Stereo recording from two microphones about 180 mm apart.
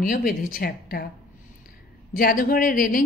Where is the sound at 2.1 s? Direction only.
55° left (ahead or behind).